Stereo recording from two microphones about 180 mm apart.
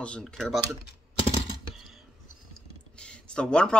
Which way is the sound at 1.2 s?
30° left (ahead or behind).